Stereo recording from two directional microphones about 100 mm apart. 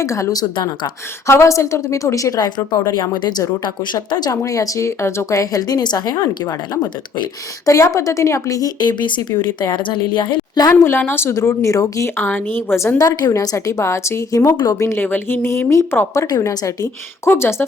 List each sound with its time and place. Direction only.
0.0 s a woman's voice: 30° left (ahead or behind)
7.6 s a woman's voice: 30° left (ahead or behind)
8.8 s a woman's voice: 50° left (ahead or behind)
10.8 s speech: 25° left (ahead or behind)
12.1 s speech: 20° left (ahead or behind)
13.0 s a woman's voice: 40° left (ahead or behind)
16.2 s a woman's voice: 40° left (ahead or behind)